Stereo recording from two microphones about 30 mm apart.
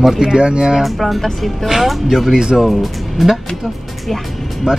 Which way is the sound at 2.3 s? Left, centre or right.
Right.